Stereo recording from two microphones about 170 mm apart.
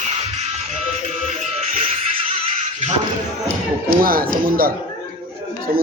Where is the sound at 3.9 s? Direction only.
60° right (ahead or behind).